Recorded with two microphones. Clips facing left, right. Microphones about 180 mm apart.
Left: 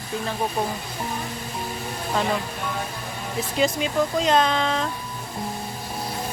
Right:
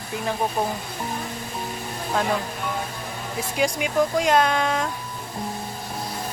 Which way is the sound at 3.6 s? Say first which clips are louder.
Even; 10° right (ahead or behind).